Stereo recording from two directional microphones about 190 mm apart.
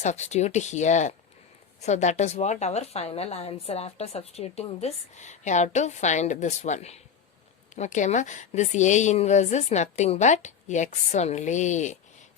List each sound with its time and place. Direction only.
0.0 s a woman's voice: 35° left (ahead or behind)